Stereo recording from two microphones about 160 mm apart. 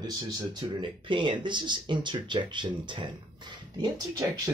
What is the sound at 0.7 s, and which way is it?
Speech, 30° right (ahead or behind).